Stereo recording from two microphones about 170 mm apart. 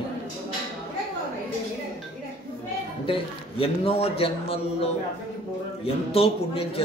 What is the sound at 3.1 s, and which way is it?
A man's voice, 35° left (ahead or behind).